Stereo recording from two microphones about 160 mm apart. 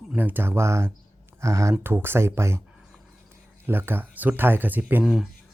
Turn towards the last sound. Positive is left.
turn(degrees=0)  # may be behind; listen again after turning